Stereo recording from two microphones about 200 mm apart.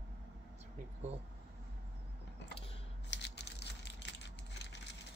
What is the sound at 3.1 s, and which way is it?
Typing, 60° left (ahead or behind).